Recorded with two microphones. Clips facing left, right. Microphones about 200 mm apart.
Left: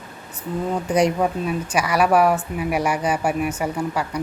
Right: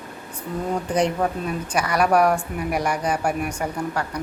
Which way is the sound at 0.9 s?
10° left (ahead or behind).